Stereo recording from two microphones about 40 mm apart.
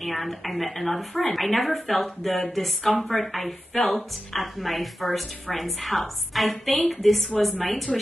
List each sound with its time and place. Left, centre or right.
0.0 s a woman's voice: centre